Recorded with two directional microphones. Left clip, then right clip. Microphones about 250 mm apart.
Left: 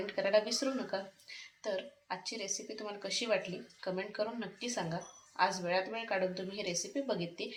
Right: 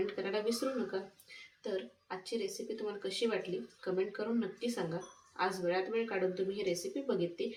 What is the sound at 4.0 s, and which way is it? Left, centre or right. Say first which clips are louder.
A woman's voice: right 3 dB; left.